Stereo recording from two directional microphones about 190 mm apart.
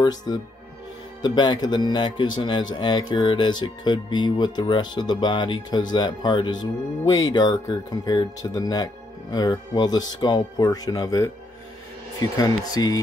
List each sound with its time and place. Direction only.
0.0 s speech: 20° left (ahead or behind)